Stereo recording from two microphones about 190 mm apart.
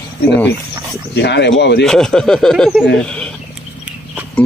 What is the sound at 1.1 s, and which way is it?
Speech, 65° left (ahead or behind).